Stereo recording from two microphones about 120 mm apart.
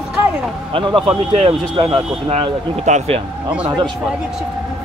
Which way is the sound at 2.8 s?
65° right (ahead or behind).